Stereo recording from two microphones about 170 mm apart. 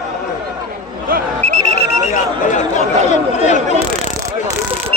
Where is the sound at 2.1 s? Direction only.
50° left (ahead or behind).